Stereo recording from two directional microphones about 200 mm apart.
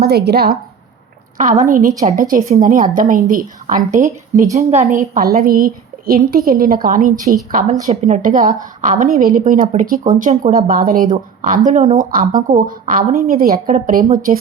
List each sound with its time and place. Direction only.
0.0 s a woman's voice: 55° right (ahead or behind)
1.4 s a woman's voice: 40° right (ahead or behind)
4.9 s a woman's voice: 45° right (ahead or behind)